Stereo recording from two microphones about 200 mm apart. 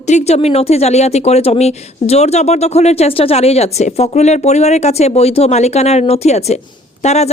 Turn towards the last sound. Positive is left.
turn(degrees=35)  # may be behind; listen again after turning